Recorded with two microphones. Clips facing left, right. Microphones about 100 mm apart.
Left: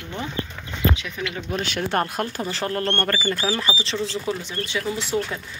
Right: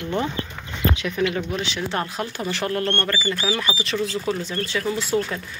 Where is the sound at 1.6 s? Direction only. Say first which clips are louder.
Left 2 dB; 50° left (ahead or behind).